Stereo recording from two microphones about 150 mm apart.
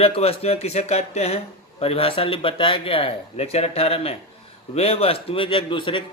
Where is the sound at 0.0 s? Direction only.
40° left (ahead or behind).